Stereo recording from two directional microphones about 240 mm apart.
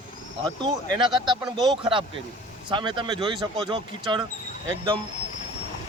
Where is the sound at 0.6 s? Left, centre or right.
Centre.